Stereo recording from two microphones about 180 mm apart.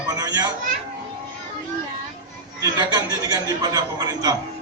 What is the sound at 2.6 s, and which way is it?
A man's voice, 20° right (ahead or behind).